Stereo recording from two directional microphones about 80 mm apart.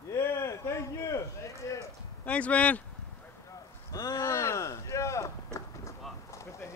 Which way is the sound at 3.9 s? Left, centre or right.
Left.